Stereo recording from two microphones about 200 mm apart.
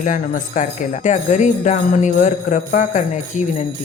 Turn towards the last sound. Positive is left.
turn(degrees=35)  # may be behind; listen again after turning